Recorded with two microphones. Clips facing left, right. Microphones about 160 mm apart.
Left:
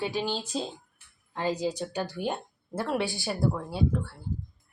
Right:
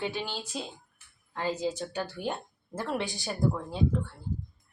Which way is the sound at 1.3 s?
15° left (ahead or behind).